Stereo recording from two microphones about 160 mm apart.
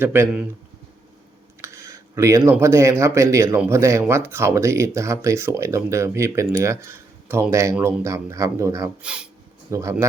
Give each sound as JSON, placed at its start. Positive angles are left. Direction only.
{"t": 0.0, "sound": "speech", "side_deg": -15}
{"t": 1.6, "sound": "speech", "side_deg": -20}
{"t": 9.0, "sound": "speech", "side_deg": -5}
{"t": 9.7, "sound": "speech", "side_deg": -20}